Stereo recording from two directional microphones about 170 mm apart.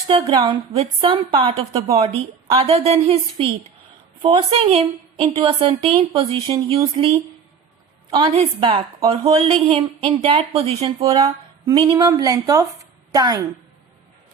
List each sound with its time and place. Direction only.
0.1 s a woman's voice: 30° right (ahead or behind)